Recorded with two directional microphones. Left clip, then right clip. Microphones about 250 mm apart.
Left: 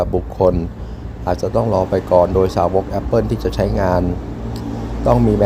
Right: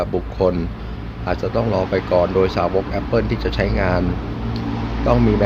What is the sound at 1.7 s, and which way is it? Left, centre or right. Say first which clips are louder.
Speech: left 4 dB; centre.